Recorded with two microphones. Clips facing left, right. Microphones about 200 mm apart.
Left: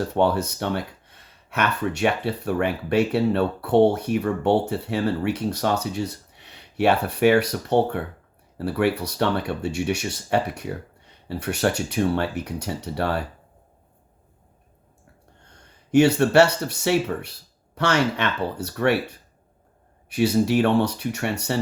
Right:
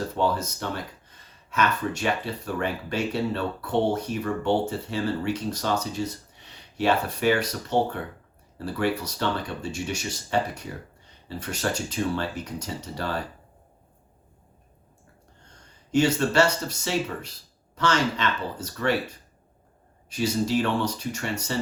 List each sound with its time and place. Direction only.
0.1 s speech: 65° left (ahead or behind)
15.5 s speech: 65° left (ahead or behind)